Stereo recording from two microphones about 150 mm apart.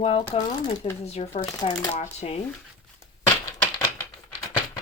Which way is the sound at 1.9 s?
45° left (ahead or behind).